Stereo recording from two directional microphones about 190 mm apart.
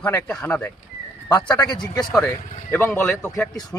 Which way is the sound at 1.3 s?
20° left (ahead or behind).